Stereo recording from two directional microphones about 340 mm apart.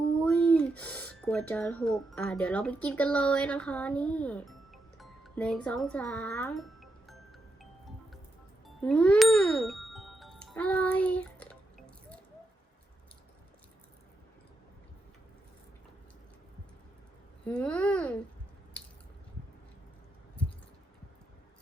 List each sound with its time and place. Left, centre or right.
0.2 s speech: centre
7.6 s music: centre
17.4 s speech: centre